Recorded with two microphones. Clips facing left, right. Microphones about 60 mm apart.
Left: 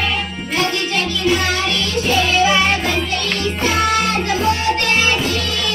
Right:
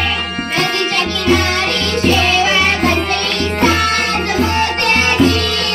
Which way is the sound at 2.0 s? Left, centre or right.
Right.